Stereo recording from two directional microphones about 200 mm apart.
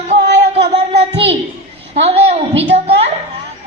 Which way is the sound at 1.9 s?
30° right (ahead or behind).